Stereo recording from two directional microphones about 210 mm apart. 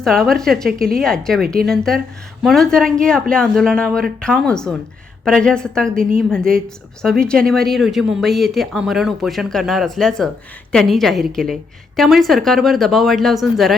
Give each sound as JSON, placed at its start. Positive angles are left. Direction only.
{"t": 0.0, "sound": "speech", "side_deg": 0}
{"t": 6.0, "sound": "a woman's voice", "side_deg": -40}
{"t": 7.0, "sound": "speech", "side_deg": 5}